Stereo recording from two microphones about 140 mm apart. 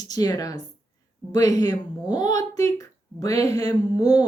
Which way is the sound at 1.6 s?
30° left (ahead or behind).